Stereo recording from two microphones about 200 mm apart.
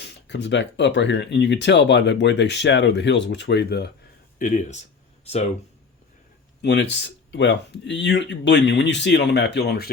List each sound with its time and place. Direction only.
0.0 s speech: 65° left (ahead or behind)
4.4 s speech: 40° left (ahead or behind)
6.6 s speech: 60° left (ahead or behind)